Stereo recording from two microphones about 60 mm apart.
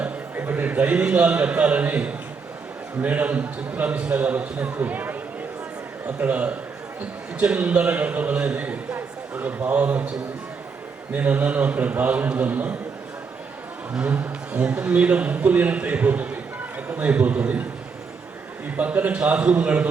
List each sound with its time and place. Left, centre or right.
0.0 s a man's voice: right
11.1 s a man's voice: right
13.9 s a man's voice: right
18.8 s a man's voice: right